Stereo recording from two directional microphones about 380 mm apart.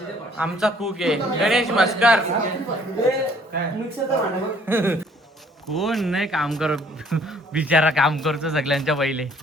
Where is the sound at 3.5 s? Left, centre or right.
Right.